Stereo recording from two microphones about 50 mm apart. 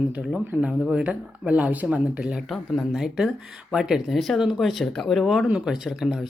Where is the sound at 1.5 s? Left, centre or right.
Right.